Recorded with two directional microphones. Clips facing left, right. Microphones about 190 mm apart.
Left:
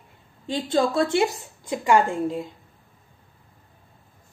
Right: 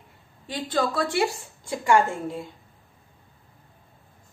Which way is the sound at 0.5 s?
25° left (ahead or behind).